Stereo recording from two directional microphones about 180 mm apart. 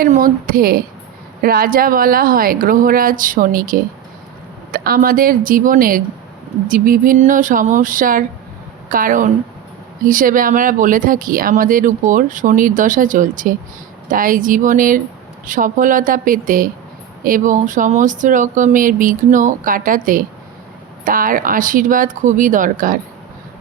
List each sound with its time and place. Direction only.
0.0 s speech: 50° right (ahead or behind)